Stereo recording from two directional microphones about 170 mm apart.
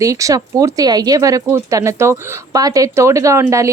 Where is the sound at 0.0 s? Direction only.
20° right (ahead or behind).